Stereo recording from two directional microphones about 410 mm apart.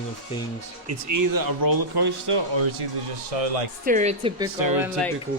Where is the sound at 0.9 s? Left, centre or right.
Right.